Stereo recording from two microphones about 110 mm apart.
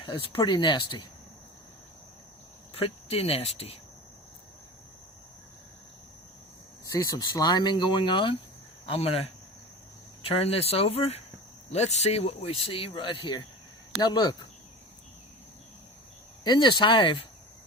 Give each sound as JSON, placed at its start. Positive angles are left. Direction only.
{"t": 0.0, "sound": "speech", "side_deg": 45}
{"t": 2.7, "sound": "speech", "side_deg": 60}
{"t": 6.8, "sound": "speech", "side_deg": 30}
{"t": 8.9, "sound": "speech", "side_deg": 65}
{"t": 11.7, "sound": "speech", "side_deg": 85}
{"t": 16.4, "sound": "speech", "side_deg": 40}